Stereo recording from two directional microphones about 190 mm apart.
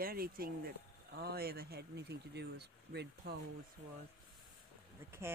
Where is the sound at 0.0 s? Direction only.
50° right (ahead or behind).